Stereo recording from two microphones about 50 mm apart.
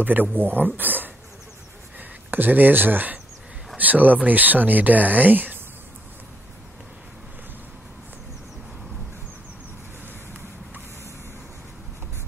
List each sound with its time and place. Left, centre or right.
0.0 s a man's voice: right